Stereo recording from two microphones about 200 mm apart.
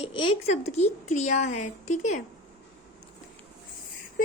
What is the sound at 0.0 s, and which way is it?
Speech, 30° left (ahead or behind).